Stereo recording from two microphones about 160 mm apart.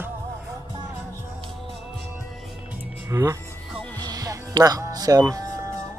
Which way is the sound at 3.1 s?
20° right (ahead or behind).